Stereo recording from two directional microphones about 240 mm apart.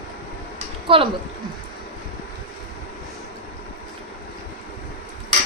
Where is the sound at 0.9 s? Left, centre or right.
Right.